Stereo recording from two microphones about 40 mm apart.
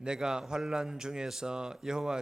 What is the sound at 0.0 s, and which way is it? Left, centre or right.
A man's voice, centre.